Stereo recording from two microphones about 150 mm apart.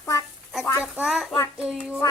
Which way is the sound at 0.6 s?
20° left (ahead or behind).